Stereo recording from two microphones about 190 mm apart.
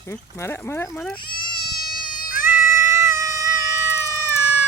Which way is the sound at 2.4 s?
10° right (ahead or behind).